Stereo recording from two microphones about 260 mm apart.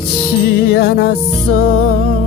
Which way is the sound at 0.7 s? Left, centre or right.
Left.